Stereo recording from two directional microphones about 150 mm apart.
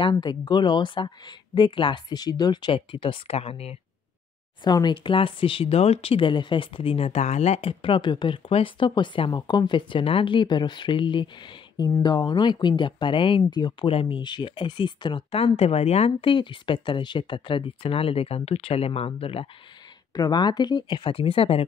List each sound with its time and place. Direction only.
0.0 s speech: 30° left (ahead or behind)
4.6 s speech: 30° left (ahead or behind)
20.2 s speech: 25° left (ahead or behind)